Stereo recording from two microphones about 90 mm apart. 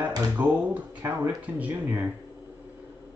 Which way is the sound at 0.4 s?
20° right (ahead or behind).